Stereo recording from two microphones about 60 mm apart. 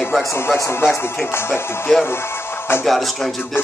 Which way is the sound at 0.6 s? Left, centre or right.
Left.